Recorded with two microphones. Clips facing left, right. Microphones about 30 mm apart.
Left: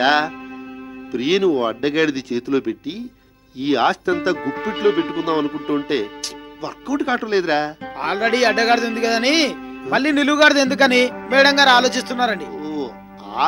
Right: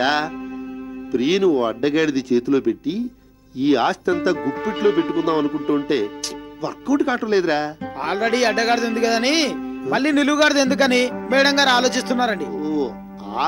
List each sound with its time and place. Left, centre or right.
0.0 s speech: left
9.6 s speech: left